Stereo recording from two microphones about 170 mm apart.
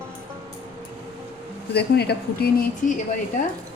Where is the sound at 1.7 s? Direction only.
70° left (ahead or behind).